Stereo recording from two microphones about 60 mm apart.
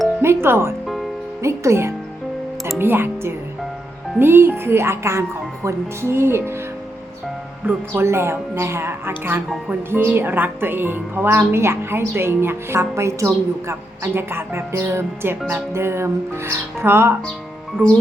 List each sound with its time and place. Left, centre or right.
0.2 s speech: right
1.4 s speech: right
2.7 s speech: right
7.6 s speech: right
8.0 s speech: right
17.8 s speech: right